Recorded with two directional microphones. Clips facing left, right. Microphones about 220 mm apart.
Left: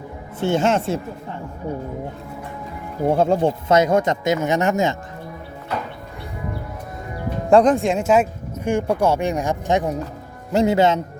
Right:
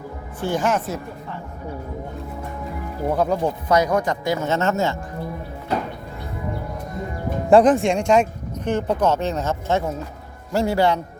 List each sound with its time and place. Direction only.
0.3 s speech: 25° left (ahead or behind)
3.1 s speech: 25° left (ahead or behind)
7.5 s speech: 5° right (ahead or behind); by 11.0 s 20° left (ahead or behind)